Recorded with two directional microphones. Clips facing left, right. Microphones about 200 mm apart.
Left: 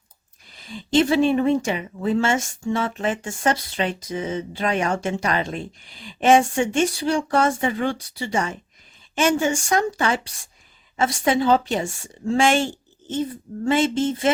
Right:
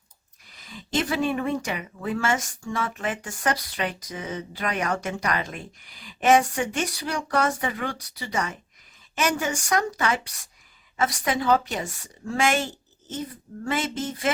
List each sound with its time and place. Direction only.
0.7 s a woman's voice: 30° left (ahead or behind)